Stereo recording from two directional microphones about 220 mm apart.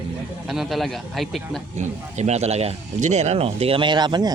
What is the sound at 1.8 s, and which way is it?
Speech, 30° right (ahead or behind).